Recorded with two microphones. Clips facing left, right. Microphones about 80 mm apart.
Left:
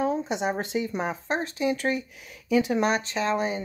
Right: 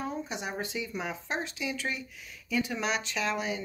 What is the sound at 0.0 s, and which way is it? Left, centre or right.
Speech, left.